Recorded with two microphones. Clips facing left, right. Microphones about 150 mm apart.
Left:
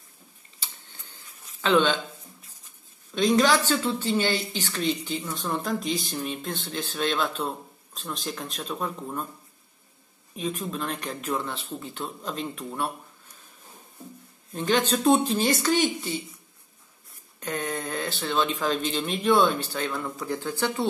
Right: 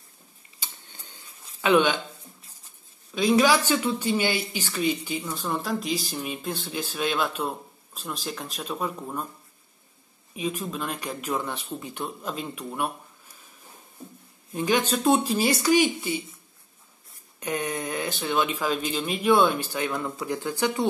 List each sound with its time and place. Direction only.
0.6 s a sound: 20° right (ahead or behind)
3.2 s a woman's voice: 10° right (ahead or behind)
10.3 s speech: 5° right (ahead or behind)
14.5 s a woman's voice: 10° right (ahead or behind)
17.4 s a woman's voice: 15° right (ahead or behind)